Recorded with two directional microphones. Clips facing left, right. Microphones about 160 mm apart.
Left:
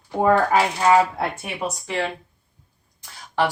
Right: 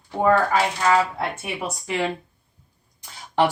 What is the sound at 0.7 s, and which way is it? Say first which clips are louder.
Speech: left 4 dB; 25° left (ahead or behind).